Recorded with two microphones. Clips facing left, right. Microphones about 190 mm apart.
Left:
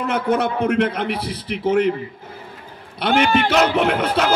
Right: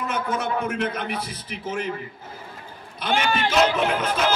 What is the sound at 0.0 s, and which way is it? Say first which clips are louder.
A man's voice: left 7 dB; 65° left (ahead or behind).